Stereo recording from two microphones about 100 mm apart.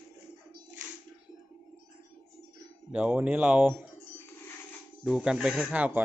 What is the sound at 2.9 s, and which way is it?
Speech, 15° right (ahead or behind).